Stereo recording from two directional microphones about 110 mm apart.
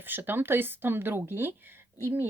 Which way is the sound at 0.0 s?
20° right (ahead or behind).